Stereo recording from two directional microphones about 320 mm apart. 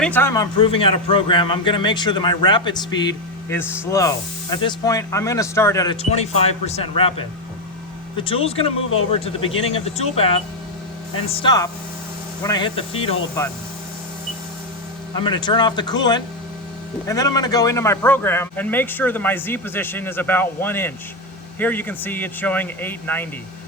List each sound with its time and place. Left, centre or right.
0.0 s a man's voice: centre
15.2 s a man's voice: centre